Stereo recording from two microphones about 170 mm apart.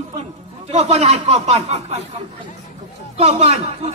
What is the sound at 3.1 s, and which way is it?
Speech, 35° right (ahead or behind).